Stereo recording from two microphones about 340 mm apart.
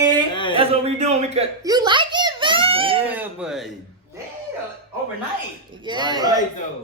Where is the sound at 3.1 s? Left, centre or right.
Centre.